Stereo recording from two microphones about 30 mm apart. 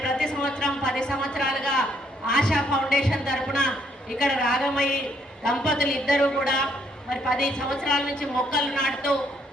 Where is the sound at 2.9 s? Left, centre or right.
Left.